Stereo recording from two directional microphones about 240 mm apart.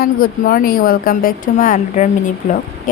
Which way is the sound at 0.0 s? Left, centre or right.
Left.